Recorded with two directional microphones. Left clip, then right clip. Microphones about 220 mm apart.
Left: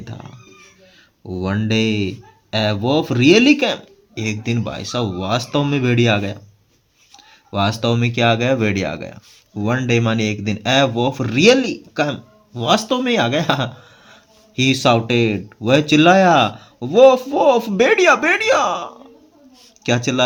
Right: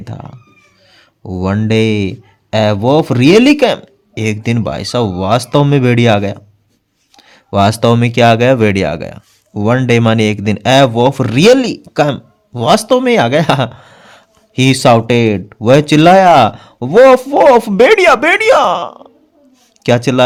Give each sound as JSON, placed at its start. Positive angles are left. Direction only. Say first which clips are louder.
{"t": 0.0, "sound": "a man's voice", "louder": "right 6 dB", "side_deg": -55}